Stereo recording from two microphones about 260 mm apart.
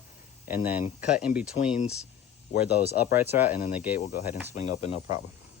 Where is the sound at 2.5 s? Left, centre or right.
Left.